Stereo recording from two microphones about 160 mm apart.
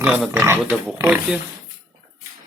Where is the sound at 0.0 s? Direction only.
5° right (ahead or behind).